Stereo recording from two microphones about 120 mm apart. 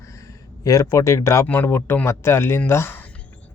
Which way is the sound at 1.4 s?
15° left (ahead or behind).